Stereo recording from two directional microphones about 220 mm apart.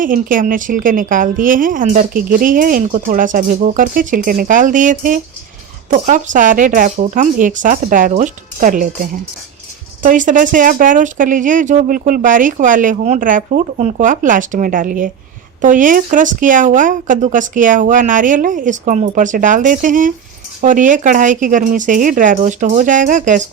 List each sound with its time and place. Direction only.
0.0 s a woman's voice: 40° right (ahead or behind)
10.0 s a woman's voice: 35° right (ahead or behind)